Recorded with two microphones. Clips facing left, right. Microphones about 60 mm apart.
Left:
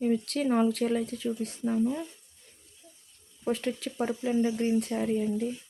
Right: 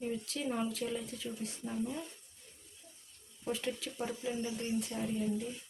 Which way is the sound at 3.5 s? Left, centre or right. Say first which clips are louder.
Left 7 dB; left.